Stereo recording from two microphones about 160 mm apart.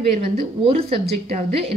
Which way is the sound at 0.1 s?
40° right (ahead or behind).